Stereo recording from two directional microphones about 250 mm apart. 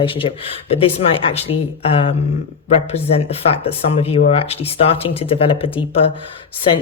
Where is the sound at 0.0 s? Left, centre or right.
Left.